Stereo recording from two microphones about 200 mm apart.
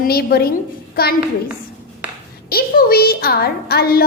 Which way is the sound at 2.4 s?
50° left (ahead or behind).